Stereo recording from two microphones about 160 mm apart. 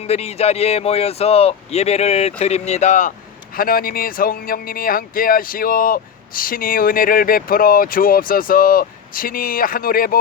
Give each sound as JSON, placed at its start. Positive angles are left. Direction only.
{"t": 0.0, "sound": "speech", "side_deg": 40}
{"t": 3.5, "sound": "speech", "side_deg": 65}